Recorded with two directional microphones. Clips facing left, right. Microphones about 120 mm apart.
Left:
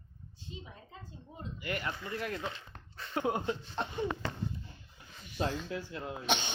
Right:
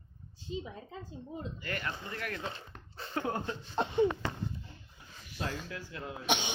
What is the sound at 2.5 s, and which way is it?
Dog, 35° right (ahead or behind).